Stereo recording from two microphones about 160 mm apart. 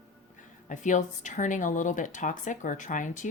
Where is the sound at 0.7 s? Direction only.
50° left (ahead or behind).